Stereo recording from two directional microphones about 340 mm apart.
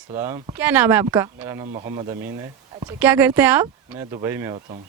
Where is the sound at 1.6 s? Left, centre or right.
Centre.